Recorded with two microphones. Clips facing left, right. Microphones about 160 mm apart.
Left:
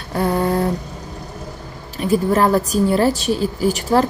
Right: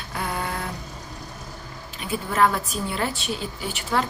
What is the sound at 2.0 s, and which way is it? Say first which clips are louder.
A woman's voice: left 7 dB; 40° left (ahead or behind).